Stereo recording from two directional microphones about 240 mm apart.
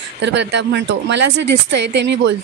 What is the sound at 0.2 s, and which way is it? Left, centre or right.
Speech, right.